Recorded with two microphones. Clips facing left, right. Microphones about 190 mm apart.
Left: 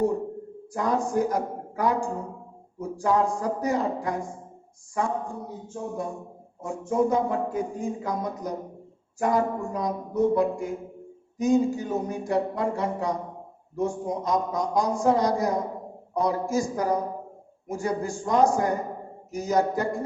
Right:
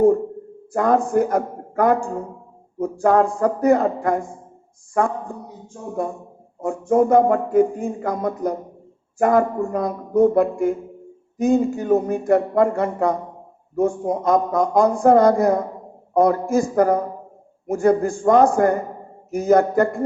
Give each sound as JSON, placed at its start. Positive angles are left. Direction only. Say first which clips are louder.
{"t": 0.7, "sound": "speech", "louder": "right 8 dB", "side_deg": -55}
{"t": 6.6, "sound": "speech", "louder": "right 7 dB", "side_deg": -55}